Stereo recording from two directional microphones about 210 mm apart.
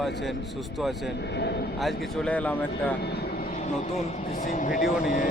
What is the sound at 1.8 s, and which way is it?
Speech, centre (ahead or behind).